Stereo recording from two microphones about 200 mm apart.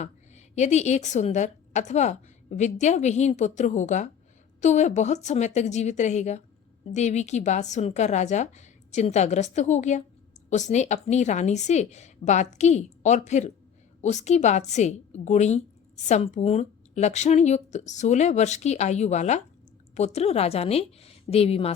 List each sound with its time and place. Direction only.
0.0 s a woman's voice: 35° left (ahead or behind)